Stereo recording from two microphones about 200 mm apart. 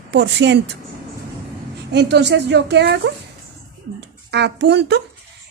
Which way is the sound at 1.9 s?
60° right (ahead or behind).